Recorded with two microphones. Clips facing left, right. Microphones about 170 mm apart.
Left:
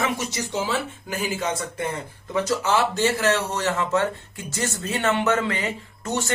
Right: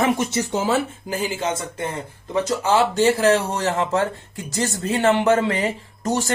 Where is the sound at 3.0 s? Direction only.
35° right (ahead or behind).